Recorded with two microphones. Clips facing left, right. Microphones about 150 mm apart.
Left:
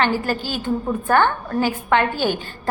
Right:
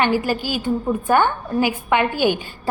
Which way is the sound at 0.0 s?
10° right (ahead or behind).